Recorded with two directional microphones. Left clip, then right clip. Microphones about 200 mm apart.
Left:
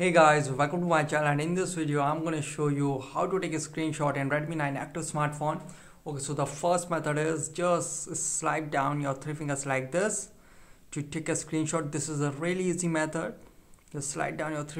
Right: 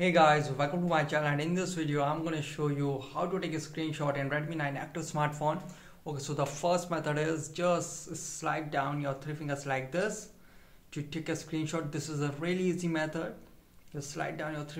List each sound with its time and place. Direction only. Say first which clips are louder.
0.0 s a man's voice: left 3 dB; 35° left (ahead or behind)